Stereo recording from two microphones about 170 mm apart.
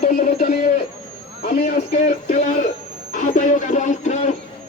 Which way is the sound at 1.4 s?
55° left (ahead or behind).